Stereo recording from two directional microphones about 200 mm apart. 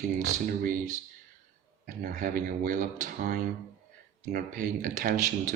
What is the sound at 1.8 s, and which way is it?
Speech, 45° right (ahead or behind).